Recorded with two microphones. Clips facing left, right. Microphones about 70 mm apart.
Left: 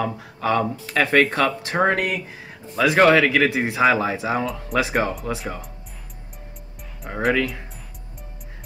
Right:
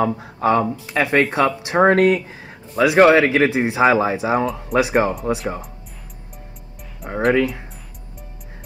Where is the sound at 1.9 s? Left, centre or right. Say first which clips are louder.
Right 8 dB; right.